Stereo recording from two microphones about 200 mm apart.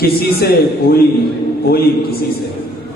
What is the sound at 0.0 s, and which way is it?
Speech, 50° left (ahead or behind).